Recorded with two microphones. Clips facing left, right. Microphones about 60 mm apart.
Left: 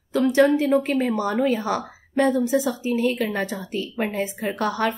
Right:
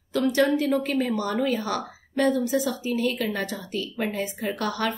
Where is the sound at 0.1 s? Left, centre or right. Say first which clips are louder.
Left 4 dB; left.